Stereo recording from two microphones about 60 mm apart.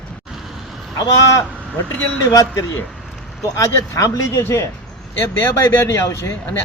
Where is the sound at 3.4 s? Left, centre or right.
Left.